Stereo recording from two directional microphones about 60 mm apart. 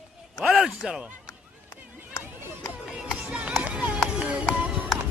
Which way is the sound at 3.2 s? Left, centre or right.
Centre.